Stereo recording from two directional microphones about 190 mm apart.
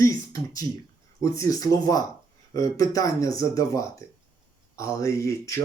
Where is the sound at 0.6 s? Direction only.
10° left (ahead or behind).